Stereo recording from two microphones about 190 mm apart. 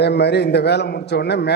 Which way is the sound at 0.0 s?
60° left (ahead or behind).